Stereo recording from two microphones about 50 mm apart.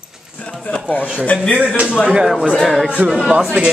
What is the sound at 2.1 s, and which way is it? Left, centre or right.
Speech, centre.